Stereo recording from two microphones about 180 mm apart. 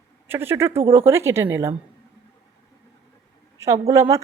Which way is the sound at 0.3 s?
15° right (ahead or behind).